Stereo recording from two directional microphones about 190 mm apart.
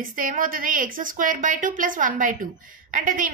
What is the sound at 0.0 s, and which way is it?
A woman's voice, 45° right (ahead or behind).